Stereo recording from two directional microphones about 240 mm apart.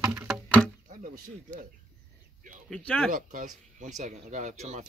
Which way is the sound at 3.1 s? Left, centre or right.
Right.